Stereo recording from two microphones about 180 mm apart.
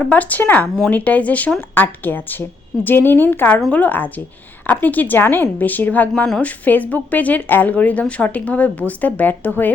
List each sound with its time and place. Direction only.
0.0 s a woman's voice: 5° left (ahead or behind)